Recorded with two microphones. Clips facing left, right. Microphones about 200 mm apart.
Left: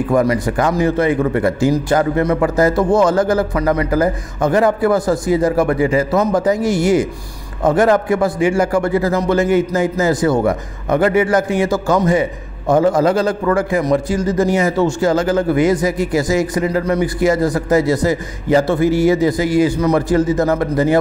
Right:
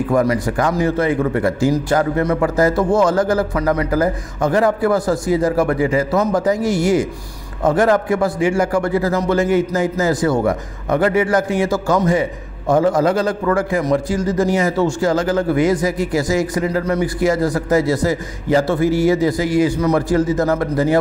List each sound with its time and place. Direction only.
0.1 s a man's voice: 15° left (ahead or behind)